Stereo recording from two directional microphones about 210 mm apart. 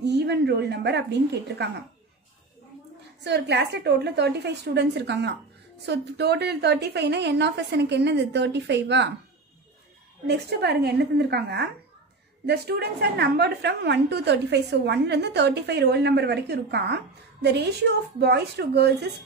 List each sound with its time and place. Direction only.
0.0 s a woman's voice: 55° right (ahead or behind)
3.3 s a woman's voice: 55° right (ahead or behind)
10.2 s a woman's voice: 50° right (ahead or behind)